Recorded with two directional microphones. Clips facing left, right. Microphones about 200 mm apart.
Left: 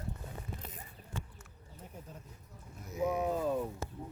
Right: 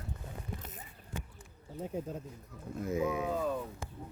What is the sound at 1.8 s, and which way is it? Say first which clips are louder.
Speech: right 13 dB; 90° right.